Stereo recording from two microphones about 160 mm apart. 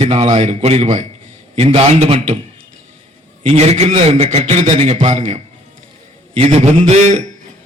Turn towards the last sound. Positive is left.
turn(degrees=-45)  # may be behind; listen again after turning